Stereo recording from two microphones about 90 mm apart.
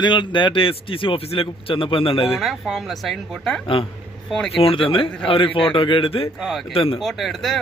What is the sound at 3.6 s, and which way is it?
A man's voice, 80° left.